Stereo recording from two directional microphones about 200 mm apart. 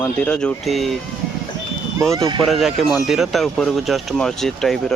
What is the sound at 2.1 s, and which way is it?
Speech, 15° right (ahead or behind).